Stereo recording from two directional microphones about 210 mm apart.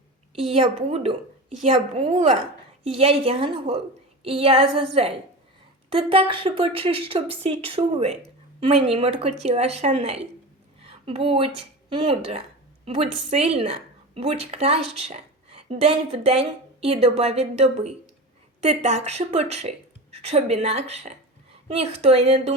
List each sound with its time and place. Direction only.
0.5 s a woman's voice: 25° right (ahead or behind)
5.9 s a woman's voice: 25° right (ahead or behind)